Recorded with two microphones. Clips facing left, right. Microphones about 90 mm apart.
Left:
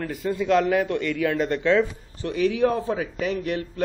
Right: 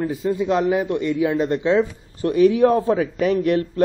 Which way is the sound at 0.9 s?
30° right (ahead or behind).